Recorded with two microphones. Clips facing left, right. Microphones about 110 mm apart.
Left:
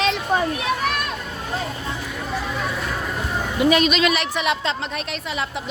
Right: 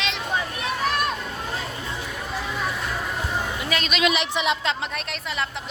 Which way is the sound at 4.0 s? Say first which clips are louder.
Left 2 dB; 20° right (ahead or behind).